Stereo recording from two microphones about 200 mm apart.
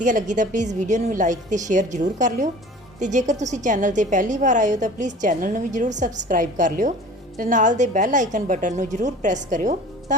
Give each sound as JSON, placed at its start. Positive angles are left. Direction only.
{"t": 0.0, "sound": "a woman's voice", "side_deg": -40}